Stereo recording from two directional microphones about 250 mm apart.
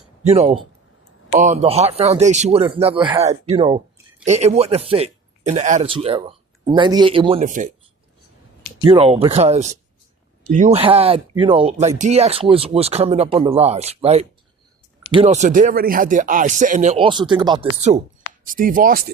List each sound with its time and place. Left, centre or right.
0.3 s speech: right
8.8 s speech: right